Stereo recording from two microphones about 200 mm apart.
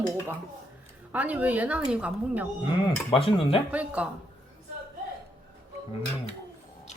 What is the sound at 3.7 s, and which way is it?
Speech, 5° right (ahead or behind).